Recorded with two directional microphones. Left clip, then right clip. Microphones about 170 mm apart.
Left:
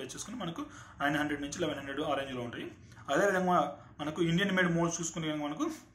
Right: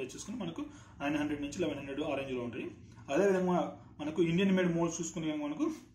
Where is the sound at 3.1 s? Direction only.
5° right (ahead or behind).